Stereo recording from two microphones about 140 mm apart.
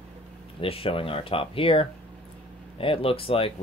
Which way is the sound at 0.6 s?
40° left (ahead or behind).